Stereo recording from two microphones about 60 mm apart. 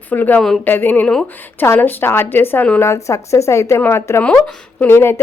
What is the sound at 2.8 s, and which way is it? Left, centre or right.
A woman's voice, left.